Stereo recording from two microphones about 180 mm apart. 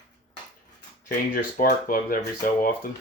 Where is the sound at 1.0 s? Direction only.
45° left (ahead or behind).